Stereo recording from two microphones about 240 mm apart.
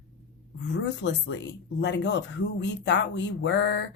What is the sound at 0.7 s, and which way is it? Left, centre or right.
Speech, left.